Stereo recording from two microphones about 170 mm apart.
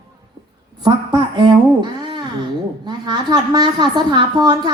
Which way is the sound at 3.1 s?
25° right (ahead or behind).